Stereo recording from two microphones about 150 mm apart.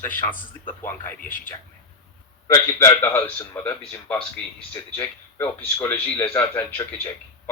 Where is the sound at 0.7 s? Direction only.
15° left (ahead or behind).